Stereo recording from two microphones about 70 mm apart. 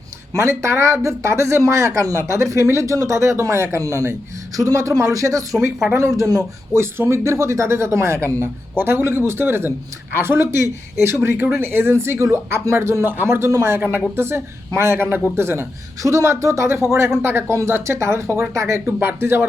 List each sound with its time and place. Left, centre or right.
0.3 s speech: right
4.5 s speech: right
6.7 s speech: right
18.9 s speech: right